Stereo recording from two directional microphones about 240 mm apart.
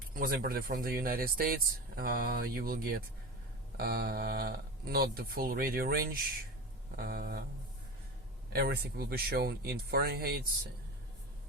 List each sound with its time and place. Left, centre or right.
0.1 s speech: right
8.5 s speech: right